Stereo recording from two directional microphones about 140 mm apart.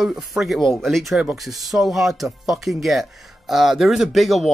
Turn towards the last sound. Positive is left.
turn(degrees=0)  # may be behind; listen again after turning